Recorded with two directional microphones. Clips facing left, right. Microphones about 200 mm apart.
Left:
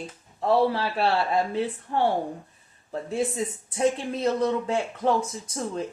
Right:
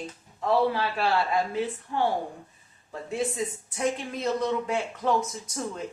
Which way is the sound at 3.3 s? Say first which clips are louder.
Left 2 dB; 30° left (ahead or behind).